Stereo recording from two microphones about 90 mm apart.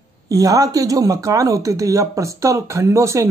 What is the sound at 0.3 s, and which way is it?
Speech, 40° right (ahead or behind).